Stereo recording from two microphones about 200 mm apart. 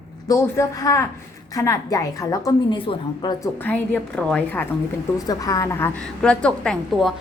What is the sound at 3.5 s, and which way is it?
A woman's voice, 10° left (ahead or behind).